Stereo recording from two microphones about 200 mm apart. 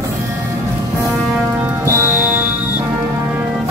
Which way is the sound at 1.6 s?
10° right (ahead or behind).